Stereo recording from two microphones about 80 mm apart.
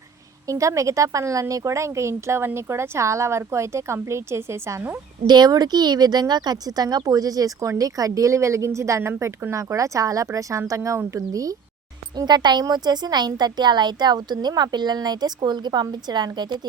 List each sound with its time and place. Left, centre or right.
0.4 s speech: right
5.2 s speech: right
12.1 s a woman's voice: right